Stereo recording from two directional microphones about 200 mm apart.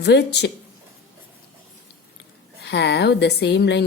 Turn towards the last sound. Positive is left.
turn(degrees=60)  # may be behind; listen again after turning